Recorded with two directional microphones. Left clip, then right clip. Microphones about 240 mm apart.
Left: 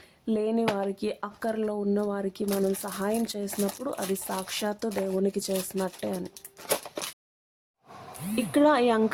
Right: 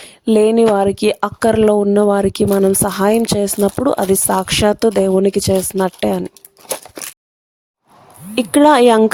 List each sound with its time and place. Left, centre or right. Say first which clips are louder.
0.0 s a sound: right 17 dB; right
0.8 s speech: right 16 dB; right
8.4 s speech: right 12 dB; right